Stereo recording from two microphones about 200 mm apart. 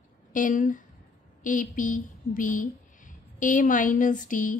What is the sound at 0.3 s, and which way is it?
A woman's voice, 40° left (ahead or behind).